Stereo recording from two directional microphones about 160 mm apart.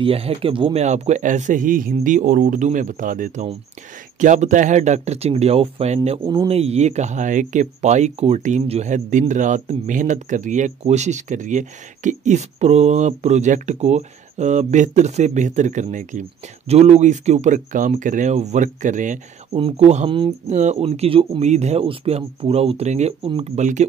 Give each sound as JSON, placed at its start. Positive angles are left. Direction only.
{"t": 0.0, "sound": "speech", "side_deg": -35}
{"t": 0.8, "sound": "speech", "side_deg": -45}
{"t": 6.2, "sound": "speech", "side_deg": -30}
{"t": 19.5, "sound": "speech", "side_deg": -40}